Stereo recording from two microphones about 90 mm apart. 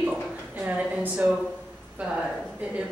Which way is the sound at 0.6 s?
15° right (ahead or behind).